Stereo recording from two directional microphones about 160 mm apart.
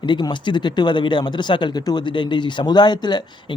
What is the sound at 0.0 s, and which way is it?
Speech, 30° left (ahead or behind).